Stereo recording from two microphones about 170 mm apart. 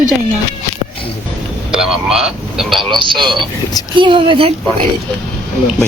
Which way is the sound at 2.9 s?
30° right (ahead or behind).